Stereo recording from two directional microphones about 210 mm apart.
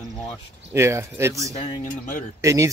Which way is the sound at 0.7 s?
15° right (ahead or behind).